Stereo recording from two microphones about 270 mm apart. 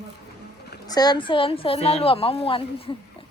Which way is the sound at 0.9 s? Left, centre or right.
Centre.